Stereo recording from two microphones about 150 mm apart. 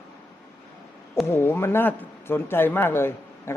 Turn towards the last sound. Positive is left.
turn(degrees=15)  # may be behind; listen again after turning